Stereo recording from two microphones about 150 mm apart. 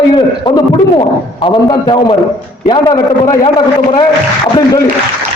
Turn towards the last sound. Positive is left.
turn(degrees=30)  # may be behind; listen again after turning